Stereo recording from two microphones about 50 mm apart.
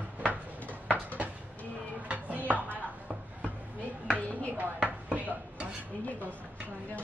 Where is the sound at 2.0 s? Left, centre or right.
Right.